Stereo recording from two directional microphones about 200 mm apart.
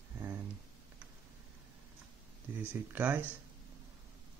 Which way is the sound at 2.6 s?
10° right (ahead or behind).